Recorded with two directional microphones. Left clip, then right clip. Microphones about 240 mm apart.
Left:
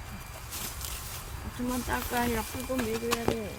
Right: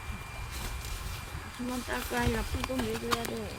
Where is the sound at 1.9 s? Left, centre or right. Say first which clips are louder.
Left 2 dB; left.